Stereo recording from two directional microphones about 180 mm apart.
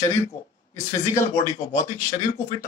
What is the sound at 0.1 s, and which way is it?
A man's voice, 15° left (ahead or behind).